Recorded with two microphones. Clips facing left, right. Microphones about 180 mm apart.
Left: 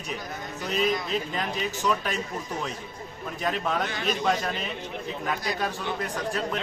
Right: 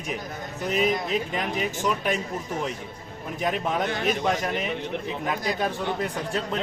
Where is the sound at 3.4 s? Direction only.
20° right (ahead or behind).